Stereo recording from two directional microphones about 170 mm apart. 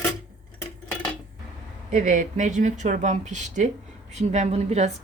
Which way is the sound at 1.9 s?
50° right (ahead or behind).